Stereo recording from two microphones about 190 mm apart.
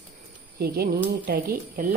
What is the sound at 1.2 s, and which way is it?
Speech, 50° right (ahead or behind).